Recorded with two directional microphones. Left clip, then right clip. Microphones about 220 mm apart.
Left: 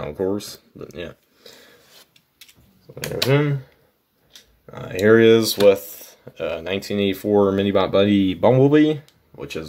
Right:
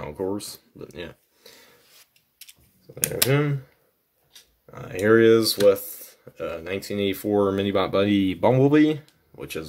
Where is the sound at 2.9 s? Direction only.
40° right (ahead or behind).